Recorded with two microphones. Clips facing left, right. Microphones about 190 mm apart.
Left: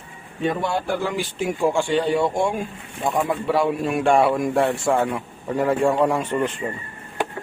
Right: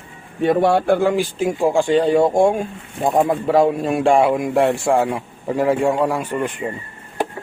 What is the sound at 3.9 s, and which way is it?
A man's voice, 25° right (ahead or behind).